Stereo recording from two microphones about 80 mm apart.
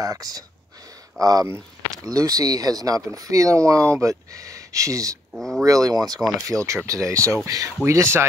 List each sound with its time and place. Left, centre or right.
0.0 s speech: right
5.3 s speech: centre
5.6 s speech: right
6.4 s speech: right